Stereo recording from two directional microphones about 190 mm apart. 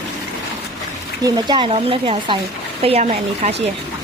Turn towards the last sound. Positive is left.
turn(degrees=-35)  # may be behind; listen again after turning